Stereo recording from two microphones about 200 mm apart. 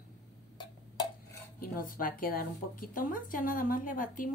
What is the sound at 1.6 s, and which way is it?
A woman's voice, 45° left (ahead or behind).